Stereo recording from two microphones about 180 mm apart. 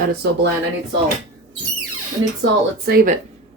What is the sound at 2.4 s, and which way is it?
Speech, 55° right (ahead or behind).